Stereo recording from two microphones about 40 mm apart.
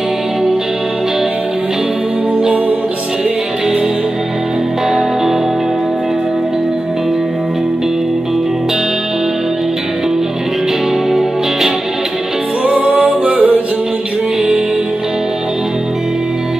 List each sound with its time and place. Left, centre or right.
11.1 s music: centre
12.6 s music: right